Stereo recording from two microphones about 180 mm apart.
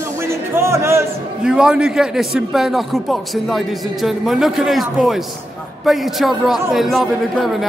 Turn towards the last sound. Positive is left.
turn(degrees=0)  # may be behind; listen again after turning